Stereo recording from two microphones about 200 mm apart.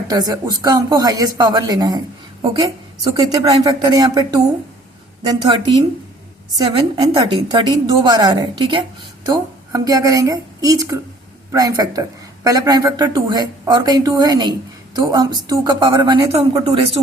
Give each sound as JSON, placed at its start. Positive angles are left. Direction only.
{"t": 0.1, "sound": "a woman's voice", "side_deg": -20}
{"t": 5.3, "sound": "a woman's voice", "side_deg": -20}